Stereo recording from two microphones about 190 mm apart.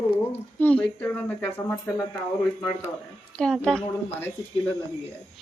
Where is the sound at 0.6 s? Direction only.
5° left (ahead or behind).